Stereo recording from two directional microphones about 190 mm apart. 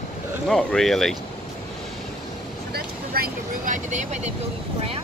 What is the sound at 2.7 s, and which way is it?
Speech, 50° right (ahead or behind).